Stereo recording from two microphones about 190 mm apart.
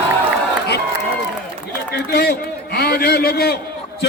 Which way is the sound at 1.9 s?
55° left (ahead or behind).